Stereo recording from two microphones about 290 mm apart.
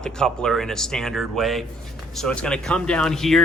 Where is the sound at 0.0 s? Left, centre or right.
Centre.